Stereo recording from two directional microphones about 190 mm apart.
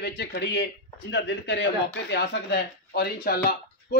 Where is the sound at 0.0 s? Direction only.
60° left (ahead or behind).